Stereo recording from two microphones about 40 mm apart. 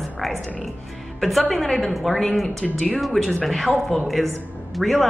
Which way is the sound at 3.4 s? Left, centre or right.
Centre.